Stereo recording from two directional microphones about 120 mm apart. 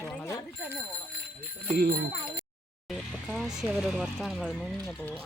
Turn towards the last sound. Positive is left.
turn(degrees=0)  # may be behind; listen again after turning